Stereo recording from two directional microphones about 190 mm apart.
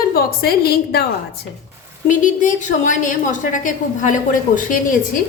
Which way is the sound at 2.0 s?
40° left (ahead or behind).